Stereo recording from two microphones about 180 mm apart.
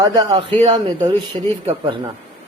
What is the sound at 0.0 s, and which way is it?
Speech, 20° right (ahead or behind).